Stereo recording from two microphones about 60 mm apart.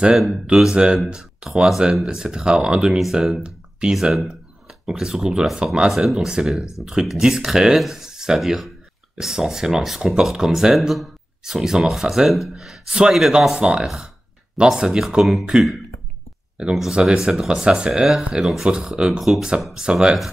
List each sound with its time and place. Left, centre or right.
0.5 s speech: centre
19.1 s speech: centre